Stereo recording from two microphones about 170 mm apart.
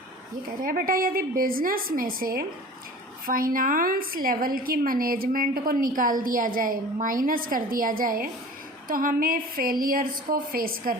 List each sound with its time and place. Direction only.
0.6 s a woman's voice: 55° right (ahead or behind)